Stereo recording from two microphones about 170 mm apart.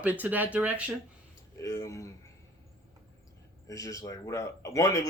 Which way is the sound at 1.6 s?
20° left (ahead or behind).